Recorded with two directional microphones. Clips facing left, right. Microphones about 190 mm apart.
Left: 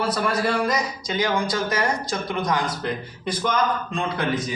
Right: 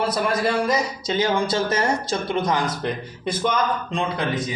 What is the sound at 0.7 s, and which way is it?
Speech, 25° right (ahead or behind).